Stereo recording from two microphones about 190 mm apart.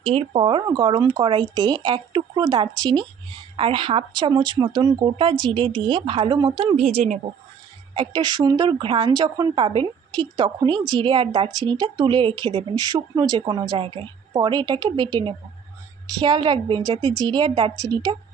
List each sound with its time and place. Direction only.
0.0 s speech: 30° right (ahead or behind)
7.9 s speech: 20° right (ahead or behind)